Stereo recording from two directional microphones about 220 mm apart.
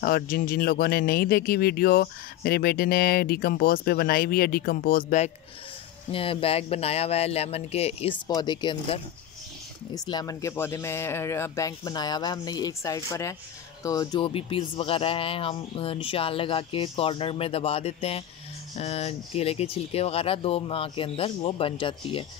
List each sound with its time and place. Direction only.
0.0 s speech: 40° left (ahead or behind)
6.1 s speech: 25° left (ahead or behind)